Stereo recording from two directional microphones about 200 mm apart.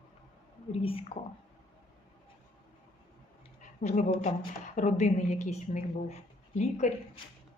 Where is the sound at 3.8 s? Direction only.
35° left (ahead or behind).